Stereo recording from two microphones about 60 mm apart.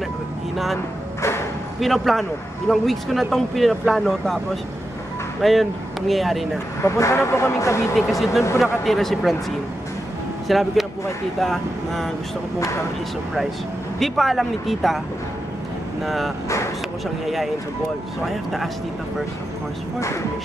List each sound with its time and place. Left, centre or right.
1.8 s speech: centre
5.4 s speech: centre
6.8 s speech: left
7.9 s speech: centre
10.5 s speech: centre
13.9 s speech: centre
18.2 s speech: centre